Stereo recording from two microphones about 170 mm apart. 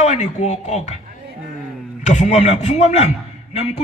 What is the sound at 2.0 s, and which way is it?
A man's voice, 45° left (ahead or behind).